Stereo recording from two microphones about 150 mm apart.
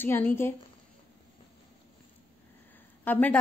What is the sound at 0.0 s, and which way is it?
Speech, 15° left (ahead or behind).